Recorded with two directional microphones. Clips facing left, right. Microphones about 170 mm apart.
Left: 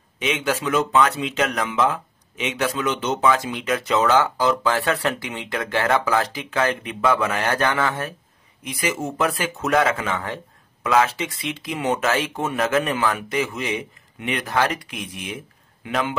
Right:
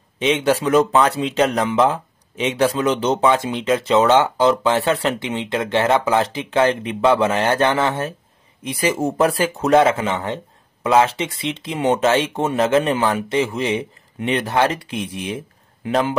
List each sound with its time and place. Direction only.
0.2 s speech: 30° right (ahead or behind)